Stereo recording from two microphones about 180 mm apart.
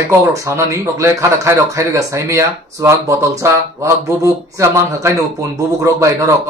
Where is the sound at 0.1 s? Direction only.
15° right (ahead or behind).